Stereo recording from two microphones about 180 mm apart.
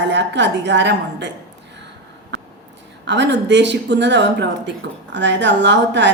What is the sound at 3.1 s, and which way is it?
A woman's voice, 75° right (ahead or behind).